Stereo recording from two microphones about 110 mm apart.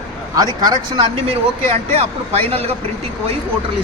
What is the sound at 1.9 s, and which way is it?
Speech, 65° right (ahead or behind).